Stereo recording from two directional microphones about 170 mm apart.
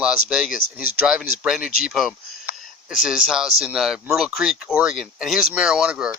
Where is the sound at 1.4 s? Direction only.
5° right (ahead or behind).